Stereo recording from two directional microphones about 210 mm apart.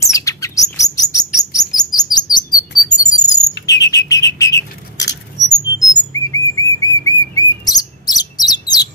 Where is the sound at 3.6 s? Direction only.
15° left (ahead or behind).